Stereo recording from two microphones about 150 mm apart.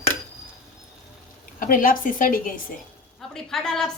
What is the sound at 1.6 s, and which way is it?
Speech, 65° left (ahead or behind).